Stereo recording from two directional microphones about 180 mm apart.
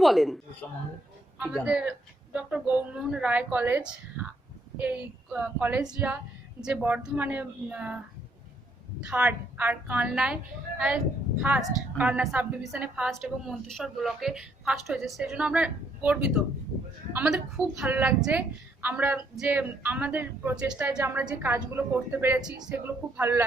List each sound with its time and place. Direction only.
0.0 s speech: centre (ahead or behind)
1.4 s a woman's voice: 5° right (ahead or behind)
9.0 s a woman's voice: 5° right (ahead or behind)